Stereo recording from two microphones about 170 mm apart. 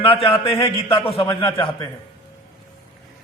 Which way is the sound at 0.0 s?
35° left (ahead or behind).